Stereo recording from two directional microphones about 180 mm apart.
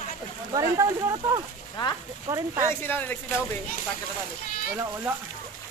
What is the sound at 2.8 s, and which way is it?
Speech, 10° left (ahead or behind).